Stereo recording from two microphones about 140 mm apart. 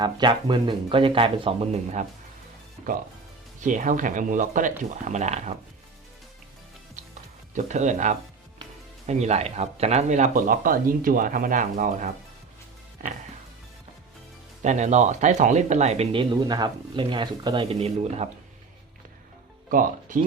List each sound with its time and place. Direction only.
0.0 s speech: 35° right (ahead or behind); by 2.0 s 50° right (ahead or behind)
3.6 s speech: 65° right (ahead or behind)
7.0 s music: 65° right (ahead or behind)
7.5 s speech: 60° right (ahead or behind)
14.6 s speech: 55° right (ahead or behind)
16.1 s speech: 30° right (ahead or behind); by 18.3 s 45° right (ahead or behind)
19.7 s speech: 75° right (ahead or behind)